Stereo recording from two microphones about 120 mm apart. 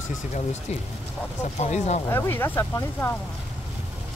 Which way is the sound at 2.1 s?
20° left (ahead or behind).